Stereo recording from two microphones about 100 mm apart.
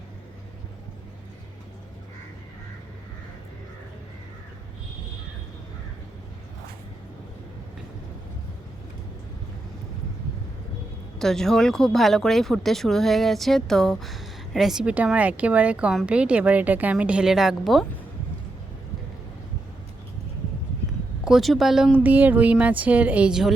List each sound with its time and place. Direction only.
11.2 s a woman's voice: 5° left (ahead or behind)
21.2 s speech: centre (ahead or behind)
21.9 s a woman's voice: 15° right (ahead or behind)